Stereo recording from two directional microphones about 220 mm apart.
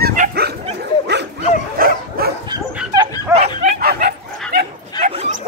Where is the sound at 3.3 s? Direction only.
15° right (ahead or behind).